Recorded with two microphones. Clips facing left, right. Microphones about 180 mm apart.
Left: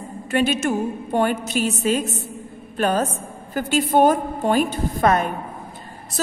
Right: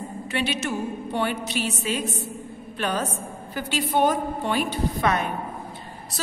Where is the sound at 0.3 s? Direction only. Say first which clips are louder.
Left 7 dB; 45° left (ahead or behind).